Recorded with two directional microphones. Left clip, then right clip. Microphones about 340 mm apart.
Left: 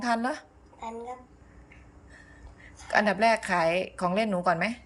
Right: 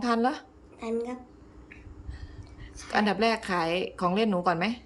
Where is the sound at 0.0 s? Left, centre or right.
Centre.